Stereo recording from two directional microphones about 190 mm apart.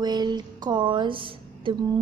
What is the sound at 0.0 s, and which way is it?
A woman's voice, 20° right (ahead or behind).